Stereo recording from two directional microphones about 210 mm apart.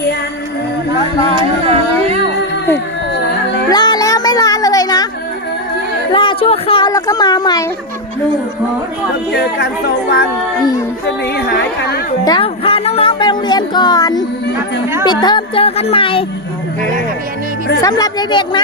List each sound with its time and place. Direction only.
3.7 s music: 20° left (ahead or behind)
6.1 s a sound: 25° left (ahead or behind)
9.3 s speech: 50° left (ahead or behind)
11.3 s speech: 50° left (ahead or behind)
12.2 s music: 20° left (ahead or behind)
15.0 s speech: 20° left (ahead or behind)
17.7 s speech: 20° left (ahead or behind)